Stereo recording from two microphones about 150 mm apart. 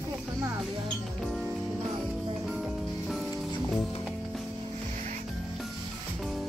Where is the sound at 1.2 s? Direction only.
Centre (ahead or behind).